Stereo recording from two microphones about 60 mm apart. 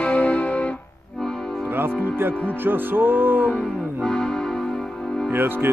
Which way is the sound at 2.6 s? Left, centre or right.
Right.